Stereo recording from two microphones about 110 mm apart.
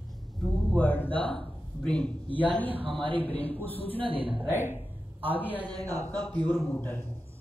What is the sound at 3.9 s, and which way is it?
Speech, 55° right (ahead or behind).